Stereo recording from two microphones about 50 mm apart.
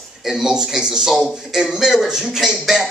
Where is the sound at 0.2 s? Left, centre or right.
Centre.